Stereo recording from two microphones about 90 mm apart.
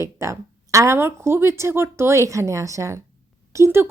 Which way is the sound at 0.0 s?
35° right (ahead or behind).